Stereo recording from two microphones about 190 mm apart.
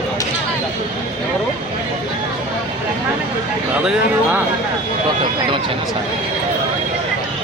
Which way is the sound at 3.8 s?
10° right (ahead or behind).